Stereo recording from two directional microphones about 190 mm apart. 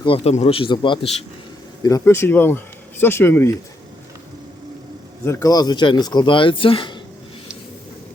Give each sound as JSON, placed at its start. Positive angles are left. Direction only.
{"t": 0.0, "sound": "speech", "side_deg": 30}
{"t": 5.2, "sound": "speech", "side_deg": 15}